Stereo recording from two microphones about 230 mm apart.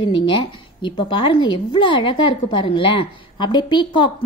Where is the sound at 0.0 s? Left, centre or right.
Centre.